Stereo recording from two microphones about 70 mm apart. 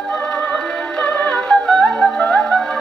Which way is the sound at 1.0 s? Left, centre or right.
Left.